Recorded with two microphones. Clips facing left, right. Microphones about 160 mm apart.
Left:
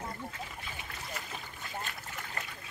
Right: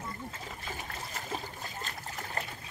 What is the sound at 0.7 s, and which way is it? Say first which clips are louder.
Trickle: right 3 dB; 40° right (ahead or behind).